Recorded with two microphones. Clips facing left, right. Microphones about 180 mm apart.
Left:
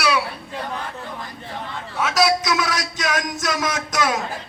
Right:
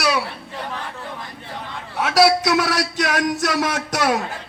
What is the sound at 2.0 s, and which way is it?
Speech, 65° right (ahead or behind).